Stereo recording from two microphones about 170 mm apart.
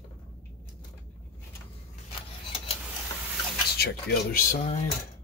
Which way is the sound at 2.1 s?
30° left (ahead or behind).